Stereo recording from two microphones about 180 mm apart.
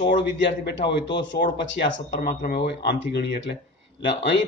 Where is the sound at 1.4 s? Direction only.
50° left (ahead or behind).